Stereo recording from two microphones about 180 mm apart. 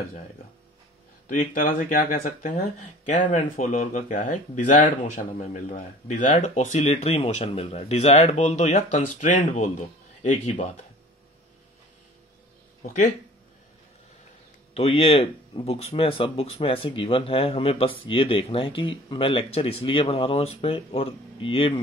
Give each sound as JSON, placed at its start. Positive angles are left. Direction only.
{"t": 1.3, "sound": "speech", "side_deg": 45}
{"t": 12.8, "sound": "speech", "side_deg": 45}
{"t": 14.7, "sound": "speech", "side_deg": 35}